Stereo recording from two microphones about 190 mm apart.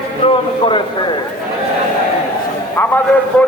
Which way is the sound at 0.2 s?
30° left (ahead or behind).